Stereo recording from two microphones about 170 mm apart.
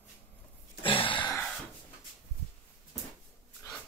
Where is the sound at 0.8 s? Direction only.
30° left (ahead or behind).